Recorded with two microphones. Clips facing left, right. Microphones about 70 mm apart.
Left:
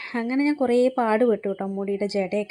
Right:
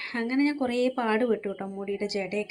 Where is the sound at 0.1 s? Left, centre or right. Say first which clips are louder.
Left 3 dB; left.